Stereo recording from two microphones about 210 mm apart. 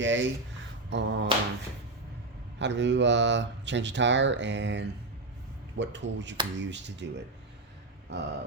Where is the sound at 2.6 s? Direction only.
55° right (ahead or behind).